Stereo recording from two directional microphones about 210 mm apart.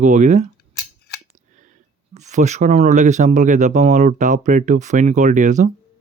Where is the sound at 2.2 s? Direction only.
35° right (ahead or behind).